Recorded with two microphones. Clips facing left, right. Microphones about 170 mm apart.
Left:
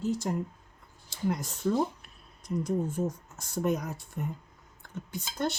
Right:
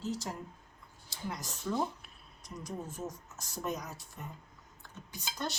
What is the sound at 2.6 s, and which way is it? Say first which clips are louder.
Speech: left 9 dB; 60° left (ahead or behind).